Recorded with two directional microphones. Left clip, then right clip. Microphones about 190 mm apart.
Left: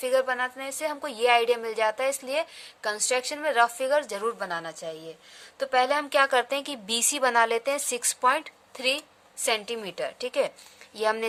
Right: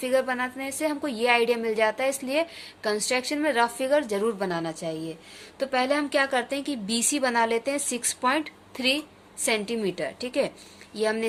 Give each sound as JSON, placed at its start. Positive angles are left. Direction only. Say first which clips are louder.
{"t": 0.0, "sound": "a woman's voice", "louder": "even", "side_deg": 35}